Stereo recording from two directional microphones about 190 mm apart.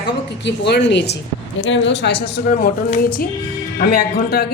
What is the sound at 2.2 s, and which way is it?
A woman's voice, 55° left (ahead or behind).